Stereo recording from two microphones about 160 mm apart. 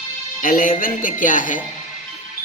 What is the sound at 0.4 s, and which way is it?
Music, 60° left (ahead or behind).